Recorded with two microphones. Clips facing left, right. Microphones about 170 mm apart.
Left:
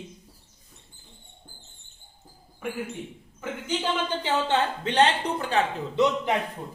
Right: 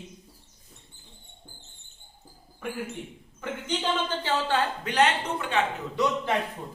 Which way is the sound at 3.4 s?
10° left (ahead or behind).